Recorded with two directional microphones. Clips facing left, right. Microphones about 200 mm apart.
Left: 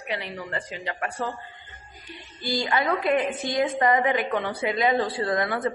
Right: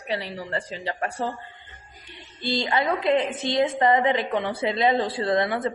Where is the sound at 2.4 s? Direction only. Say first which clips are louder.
Right 1 dB; 25° right (ahead or behind).